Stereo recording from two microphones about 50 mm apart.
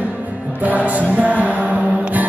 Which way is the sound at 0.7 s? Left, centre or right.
Right.